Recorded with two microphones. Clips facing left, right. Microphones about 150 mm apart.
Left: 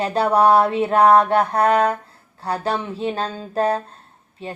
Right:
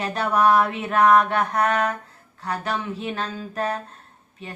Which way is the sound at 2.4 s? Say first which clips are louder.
Left 4 dB; 30° left (ahead or behind).